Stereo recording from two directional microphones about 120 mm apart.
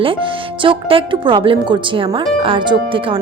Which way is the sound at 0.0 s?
45° right (ahead or behind).